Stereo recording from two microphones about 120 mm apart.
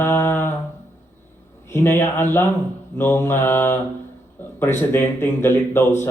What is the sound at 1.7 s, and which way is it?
Speech, 20° left (ahead or behind).